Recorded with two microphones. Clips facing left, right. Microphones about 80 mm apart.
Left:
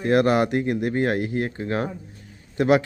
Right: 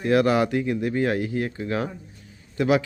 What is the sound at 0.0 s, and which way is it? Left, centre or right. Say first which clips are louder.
Speech: left 1 dB; left.